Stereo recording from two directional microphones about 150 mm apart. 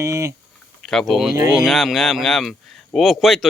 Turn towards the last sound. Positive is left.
turn(degrees=0)  # may be behind; listen again after turning